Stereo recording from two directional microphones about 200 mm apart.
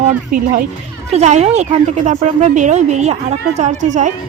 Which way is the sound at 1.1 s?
35° right (ahead or behind).